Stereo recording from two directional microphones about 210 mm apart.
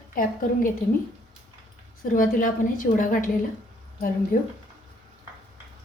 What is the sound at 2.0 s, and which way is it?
A woman's voice, 40° left (ahead or behind).